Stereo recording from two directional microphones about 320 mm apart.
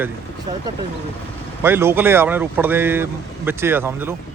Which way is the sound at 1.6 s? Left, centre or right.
Centre.